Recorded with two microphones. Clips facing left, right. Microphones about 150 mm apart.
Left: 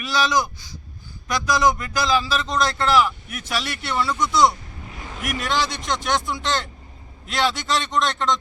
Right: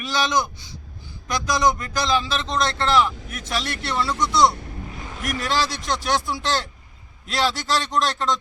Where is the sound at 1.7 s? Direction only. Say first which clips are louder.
Left 1 dB; 5° left (ahead or behind).